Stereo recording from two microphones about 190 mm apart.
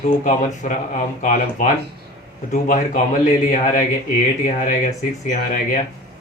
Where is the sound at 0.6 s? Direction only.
40° left (ahead or behind).